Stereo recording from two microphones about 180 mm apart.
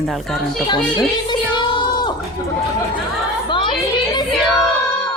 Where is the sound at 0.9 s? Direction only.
25° left (ahead or behind).